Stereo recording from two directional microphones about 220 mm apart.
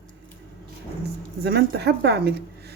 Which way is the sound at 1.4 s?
50° right (ahead or behind).